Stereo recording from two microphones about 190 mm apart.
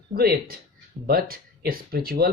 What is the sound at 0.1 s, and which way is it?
Speech, 50° right (ahead or behind).